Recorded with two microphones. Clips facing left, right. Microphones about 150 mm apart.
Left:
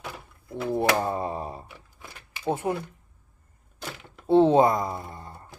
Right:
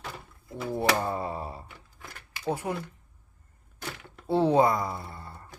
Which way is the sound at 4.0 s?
20° left (ahead or behind).